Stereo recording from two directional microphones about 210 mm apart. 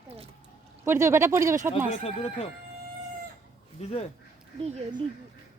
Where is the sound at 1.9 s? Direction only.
30° left (ahead or behind).